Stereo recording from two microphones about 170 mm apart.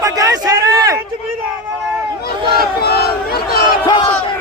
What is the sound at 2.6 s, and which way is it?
Speech, 70° left (ahead or behind).